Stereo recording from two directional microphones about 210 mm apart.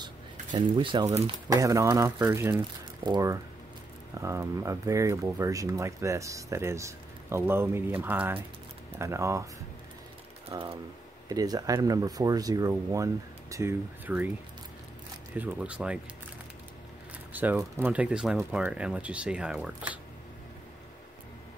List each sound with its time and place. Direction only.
0.0 s speech: 20° right (ahead or behind)
1.5 s speech: 15° right (ahead or behind)
10.5 s speech: 20° right (ahead or behind)
15.3 s speech: 5° right (ahead or behind)
17.3 s speech: 10° right (ahead or behind)